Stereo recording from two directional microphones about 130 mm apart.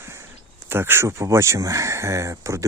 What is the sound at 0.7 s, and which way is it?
Speech, 20° right (ahead or behind).